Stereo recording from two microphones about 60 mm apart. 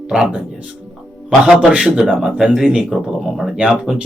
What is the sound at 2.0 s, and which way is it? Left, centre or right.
Speech, centre.